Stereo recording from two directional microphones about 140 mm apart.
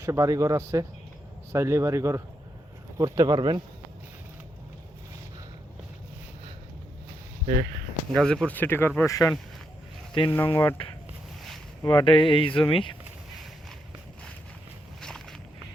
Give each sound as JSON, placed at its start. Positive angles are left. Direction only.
{"t": 0.0, "sound": "speech", "side_deg": -20}
{"t": 8.1, "sound": "speech", "side_deg": 5}
{"t": 11.8, "sound": "speech", "side_deg": 30}
{"t": 15.0, "sound": "vehicle", "side_deg": 5}